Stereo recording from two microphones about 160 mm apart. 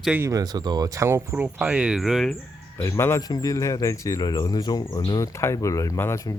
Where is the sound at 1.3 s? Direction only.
5° right (ahead or behind).